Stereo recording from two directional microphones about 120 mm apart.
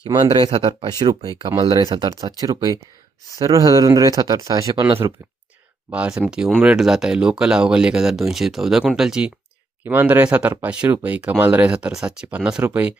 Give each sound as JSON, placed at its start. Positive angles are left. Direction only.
{"t": 0.1, "sound": "speech", "side_deg": -35}
{"t": 4.9, "sound": "speech", "side_deg": -20}
{"t": 5.9, "sound": "speech", "side_deg": -10}
{"t": 9.8, "sound": "speech", "side_deg": -15}